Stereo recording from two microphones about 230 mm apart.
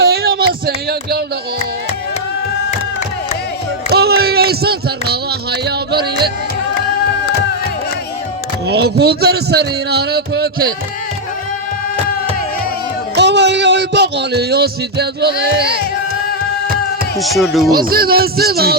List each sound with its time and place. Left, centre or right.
0.0 s a sound: right
3.9 s music: right
8.6 s speech: right
13.1 s speech: right
17.2 s speech: centre
17.7 s speech: right